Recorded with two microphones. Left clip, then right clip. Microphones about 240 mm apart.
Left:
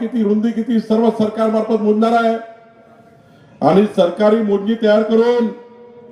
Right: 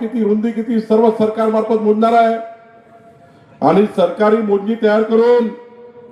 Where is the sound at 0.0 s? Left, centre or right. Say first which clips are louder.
Right 1 dB; left.